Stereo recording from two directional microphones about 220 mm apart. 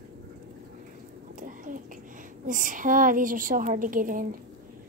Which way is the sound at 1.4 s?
35° right (ahead or behind).